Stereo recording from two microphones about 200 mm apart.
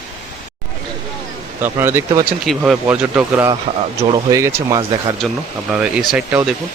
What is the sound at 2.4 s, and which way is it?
Speech, centre (ahead or behind).